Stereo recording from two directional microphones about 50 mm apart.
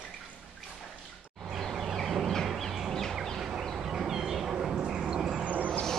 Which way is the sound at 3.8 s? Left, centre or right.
Centre.